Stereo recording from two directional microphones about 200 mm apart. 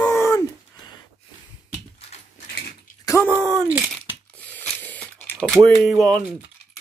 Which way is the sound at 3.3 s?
15° right (ahead or behind).